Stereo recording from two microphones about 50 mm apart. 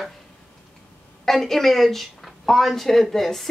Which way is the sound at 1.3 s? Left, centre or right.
Centre.